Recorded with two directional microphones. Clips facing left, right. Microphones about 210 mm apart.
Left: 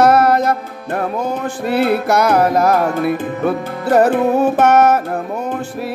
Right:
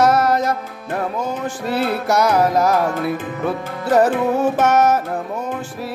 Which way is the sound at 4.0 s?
60° left (ahead or behind).